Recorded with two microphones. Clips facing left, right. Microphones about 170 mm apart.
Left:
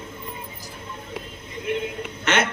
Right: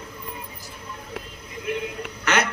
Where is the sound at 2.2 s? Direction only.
25° left (ahead or behind).